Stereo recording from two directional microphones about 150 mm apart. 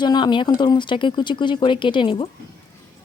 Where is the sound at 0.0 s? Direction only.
30° left (ahead or behind).